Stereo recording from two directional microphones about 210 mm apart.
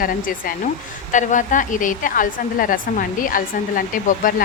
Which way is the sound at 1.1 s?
35° left (ahead or behind).